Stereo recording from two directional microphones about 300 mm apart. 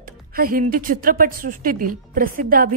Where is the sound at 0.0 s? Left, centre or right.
Right.